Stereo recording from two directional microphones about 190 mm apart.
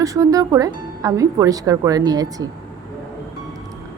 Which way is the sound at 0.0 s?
15° right (ahead or behind).